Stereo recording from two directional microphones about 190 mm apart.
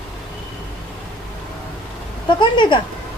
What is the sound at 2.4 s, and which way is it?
Speech, 25° left (ahead or behind).